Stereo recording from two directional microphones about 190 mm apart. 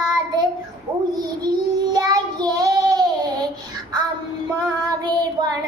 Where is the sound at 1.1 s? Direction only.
20° right (ahead or behind).